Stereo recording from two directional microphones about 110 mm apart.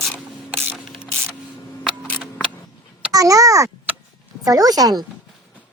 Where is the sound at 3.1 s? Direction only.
30° right (ahead or behind).